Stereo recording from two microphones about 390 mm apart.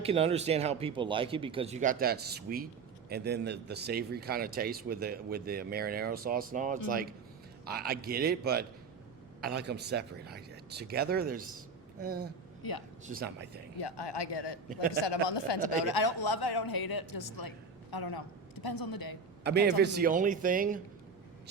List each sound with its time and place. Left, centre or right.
0.0 s speech: centre
12.6 s a man's voice: left
13.1 s speech: right
13.7 s a man's voice: left
15.8 s a man's voice: left
19.5 s speech: right